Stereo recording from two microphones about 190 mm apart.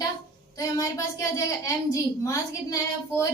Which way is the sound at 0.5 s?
15° left (ahead or behind).